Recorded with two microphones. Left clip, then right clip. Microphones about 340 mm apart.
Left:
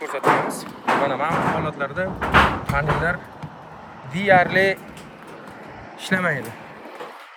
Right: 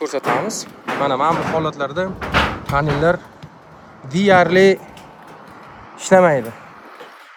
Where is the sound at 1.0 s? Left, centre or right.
Centre.